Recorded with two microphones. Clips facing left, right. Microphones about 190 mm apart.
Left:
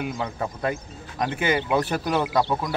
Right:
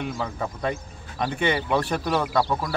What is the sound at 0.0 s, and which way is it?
Speech, 5° left (ahead or behind).